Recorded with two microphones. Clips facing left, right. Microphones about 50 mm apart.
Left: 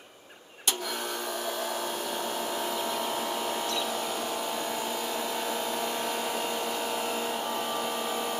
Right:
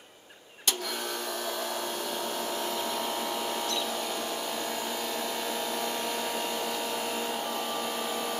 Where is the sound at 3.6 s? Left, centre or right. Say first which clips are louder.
Left 1 dB; centre.